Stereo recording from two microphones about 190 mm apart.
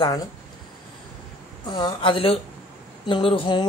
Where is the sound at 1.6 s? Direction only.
25° left (ahead or behind).